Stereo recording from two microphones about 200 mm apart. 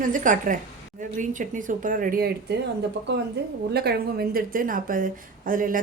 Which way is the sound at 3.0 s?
60° right (ahead or behind).